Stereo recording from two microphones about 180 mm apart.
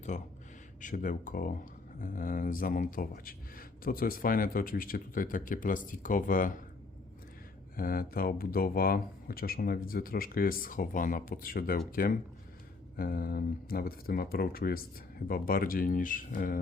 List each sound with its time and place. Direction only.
0.1 s speech: 45° left (ahead or behind)
7.8 s speech: 55° left (ahead or behind)